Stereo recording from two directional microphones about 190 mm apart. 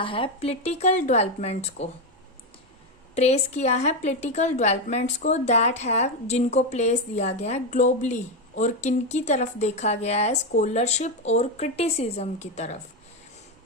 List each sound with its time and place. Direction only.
0.0 s a woman's voice: 30° left (ahead or behind)
3.2 s a woman's voice: 35° left (ahead or behind)